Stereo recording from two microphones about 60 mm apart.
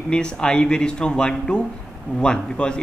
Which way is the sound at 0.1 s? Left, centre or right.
Centre.